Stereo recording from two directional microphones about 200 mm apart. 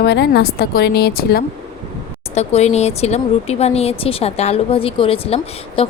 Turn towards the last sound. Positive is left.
turn(degrees=30)  # may be behind; listen again after turning